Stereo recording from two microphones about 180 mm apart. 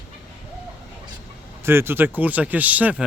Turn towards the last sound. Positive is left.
turn(degrees=-10)  # may be behind; listen again after turning